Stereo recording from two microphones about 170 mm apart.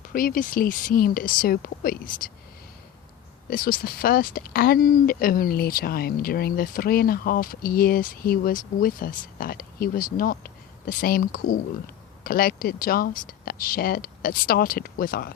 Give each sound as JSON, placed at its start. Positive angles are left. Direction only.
{"t": 0.0, "sound": "speech", "side_deg": 55}
{"t": 3.5, "sound": "speech", "side_deg": 55}